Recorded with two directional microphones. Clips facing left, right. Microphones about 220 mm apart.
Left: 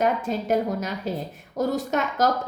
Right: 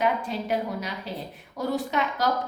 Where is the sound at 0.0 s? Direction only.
45° left (ahead or behind).